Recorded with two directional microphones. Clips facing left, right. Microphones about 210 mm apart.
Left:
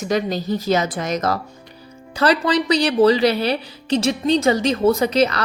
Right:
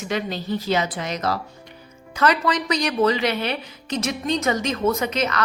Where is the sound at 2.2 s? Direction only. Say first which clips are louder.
Left 3 dB; 30° left (ahead or behind).